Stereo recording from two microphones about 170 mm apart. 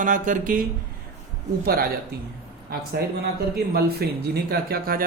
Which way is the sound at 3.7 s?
70° right (ahead or behind).